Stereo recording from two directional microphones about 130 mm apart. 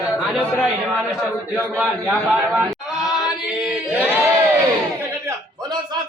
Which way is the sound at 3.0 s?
5° right (ahead or behind).